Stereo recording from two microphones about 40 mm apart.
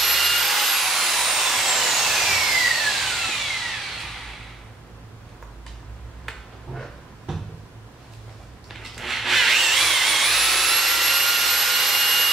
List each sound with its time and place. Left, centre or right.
0.0 s a sound: centre
6.2 s finger snapping: centre
7.3 s cupboard open or close: centre
8.6 s tools: centre